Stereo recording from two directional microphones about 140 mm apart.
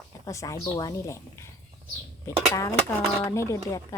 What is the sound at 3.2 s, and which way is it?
Speech, 20° left (ahead or behind).